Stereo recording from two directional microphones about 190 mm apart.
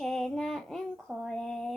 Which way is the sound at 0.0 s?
Centre (ahead or behind).